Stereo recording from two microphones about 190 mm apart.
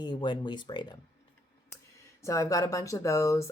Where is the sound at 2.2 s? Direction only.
15° left (ahead or behind).